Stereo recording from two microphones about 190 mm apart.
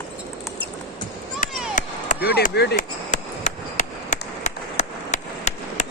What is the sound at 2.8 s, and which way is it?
Chop, 40° left (ahead or behind).